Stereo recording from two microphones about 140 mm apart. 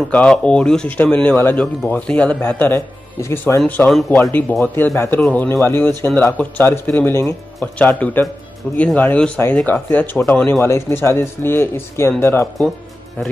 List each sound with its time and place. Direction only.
0.1 s speech: 10° left (ahead or behind)